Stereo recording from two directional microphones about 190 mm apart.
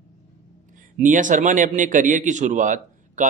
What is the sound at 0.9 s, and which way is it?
Speech, 40° right (ahead or behind).